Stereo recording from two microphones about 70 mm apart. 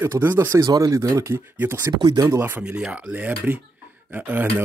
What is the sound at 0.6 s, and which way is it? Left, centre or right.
Speech, right.